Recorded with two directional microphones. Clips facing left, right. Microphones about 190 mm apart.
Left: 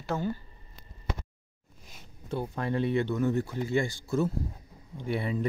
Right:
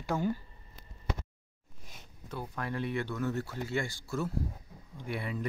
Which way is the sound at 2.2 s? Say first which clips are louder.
Left 6 dB; 30° left (ahead or behind).